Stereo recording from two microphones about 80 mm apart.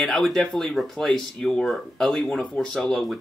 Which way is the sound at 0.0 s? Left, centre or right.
Centre.